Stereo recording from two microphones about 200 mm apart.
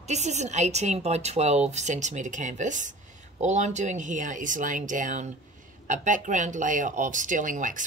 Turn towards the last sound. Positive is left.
turn(degrees=-40)  # may be behind; listen again after turning